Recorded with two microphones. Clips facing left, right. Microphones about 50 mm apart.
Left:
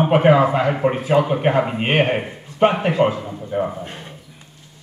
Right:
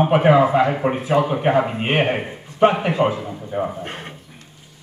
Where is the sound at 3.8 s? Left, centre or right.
Right.